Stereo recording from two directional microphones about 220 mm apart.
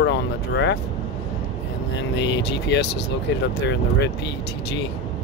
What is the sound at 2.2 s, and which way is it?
Speech, 50° left (ahead or behind).